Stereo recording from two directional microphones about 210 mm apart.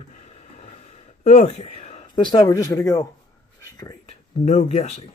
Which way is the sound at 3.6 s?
15° left (ahead or behind).